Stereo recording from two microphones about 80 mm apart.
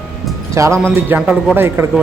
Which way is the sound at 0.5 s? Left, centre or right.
Right.